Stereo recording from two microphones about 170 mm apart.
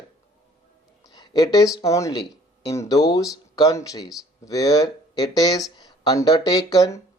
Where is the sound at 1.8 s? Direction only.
20° left (ahead or behind).